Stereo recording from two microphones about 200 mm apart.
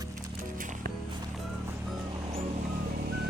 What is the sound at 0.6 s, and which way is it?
Music, 40° right (ahead or behind).